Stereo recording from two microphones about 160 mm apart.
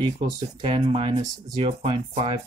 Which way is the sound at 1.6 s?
35° right (ahead or behind).